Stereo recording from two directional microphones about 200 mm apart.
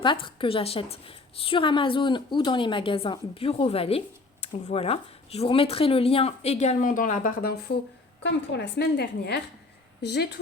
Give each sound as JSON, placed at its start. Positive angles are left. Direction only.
{"t": 0.0, "sound": "a woman's voice", "side_deg": 25}
{"t": 8.2, "sound": "a woman's voice", "side_deg": 60}